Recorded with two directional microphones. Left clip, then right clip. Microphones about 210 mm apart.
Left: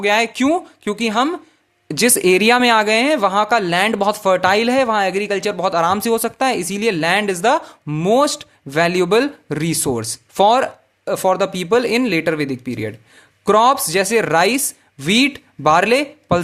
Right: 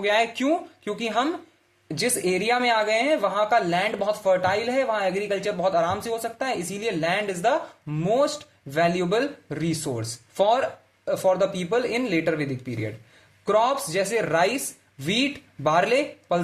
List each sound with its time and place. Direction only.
0.0 s speech: 30° left (ahead or behind)